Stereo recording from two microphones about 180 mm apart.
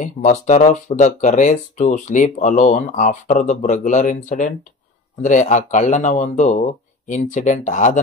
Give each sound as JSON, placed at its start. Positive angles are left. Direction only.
{"t": 0.0, "sound": "speech", "side_deg": 40}